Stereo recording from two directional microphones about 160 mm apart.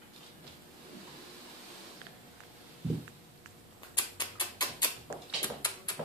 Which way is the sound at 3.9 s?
25° left (ahead or behind).